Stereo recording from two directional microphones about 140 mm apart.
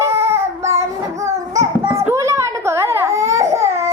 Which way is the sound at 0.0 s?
20° right (ahead or behind).